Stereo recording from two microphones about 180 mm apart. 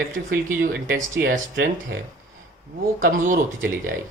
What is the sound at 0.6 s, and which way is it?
Speech, 50° right (ahead or behind).